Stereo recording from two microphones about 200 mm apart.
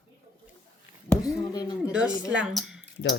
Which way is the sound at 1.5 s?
20° left (ahead or behind).